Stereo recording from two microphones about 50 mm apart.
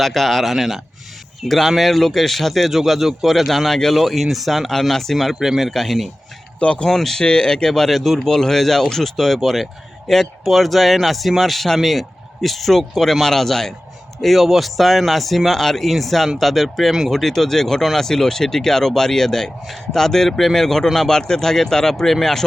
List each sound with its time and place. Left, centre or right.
0.0 s a man's voice: centre
6.6 s speech: left
6.8 s a man's voice: centre